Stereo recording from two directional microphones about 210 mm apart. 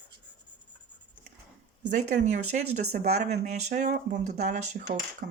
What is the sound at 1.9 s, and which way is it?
Speech, 35° right (ahead or behind).